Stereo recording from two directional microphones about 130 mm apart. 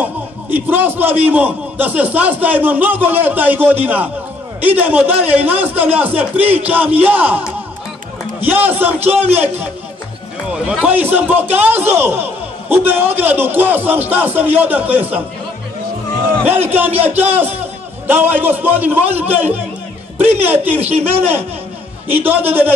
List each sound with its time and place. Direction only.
0.0 s a man's voice: 15° right (ahead or behind)
16.4 s a man's voice: 15° right (ahead or behind)
22.0 s a man's voice: 15° right (ahead or behind)